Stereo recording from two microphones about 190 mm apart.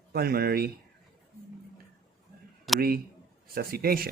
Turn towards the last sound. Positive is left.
turn(degrees=-50)  # may be behind; listen again after turning